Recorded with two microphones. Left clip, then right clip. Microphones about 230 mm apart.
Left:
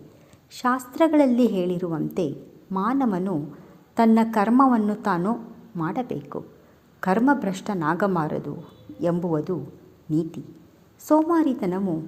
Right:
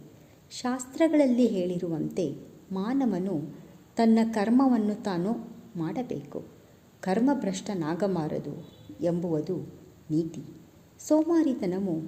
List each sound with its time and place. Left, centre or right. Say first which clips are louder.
0.5 s a woman's voice: left 8 dB; centre